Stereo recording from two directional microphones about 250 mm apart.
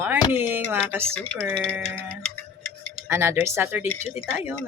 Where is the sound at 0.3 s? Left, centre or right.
Centre.